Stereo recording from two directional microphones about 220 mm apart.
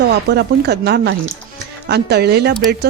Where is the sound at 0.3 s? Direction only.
45° right (ahead or behind).